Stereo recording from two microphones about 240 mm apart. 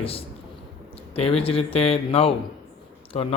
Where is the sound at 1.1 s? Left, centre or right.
Left.